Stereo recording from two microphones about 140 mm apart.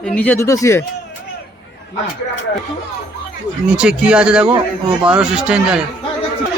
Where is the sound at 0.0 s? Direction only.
10° left (ahead or behind).